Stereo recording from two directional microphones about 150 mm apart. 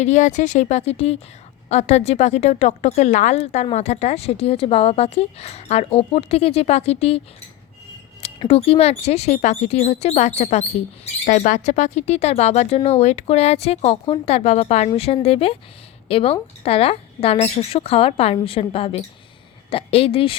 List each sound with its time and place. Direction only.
0.0 s speech: 55° left (ahead or behind)
8.4 s speech: 40° left (ahead or behind)